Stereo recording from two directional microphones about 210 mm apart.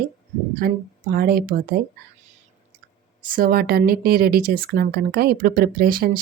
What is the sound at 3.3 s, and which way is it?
Speech, 45° right (ahead or behind).